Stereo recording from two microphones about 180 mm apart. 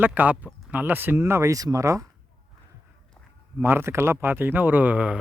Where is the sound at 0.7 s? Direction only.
10° right (ahead or behind).